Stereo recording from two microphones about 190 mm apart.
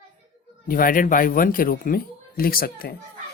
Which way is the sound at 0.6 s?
45° left (ahead or behind).